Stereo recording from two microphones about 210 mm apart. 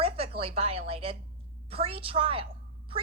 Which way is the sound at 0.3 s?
30° right (ahead or behind).